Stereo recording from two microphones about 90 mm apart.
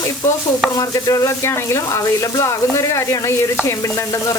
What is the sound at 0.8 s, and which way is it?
Stir, 40° left (ahead or behind).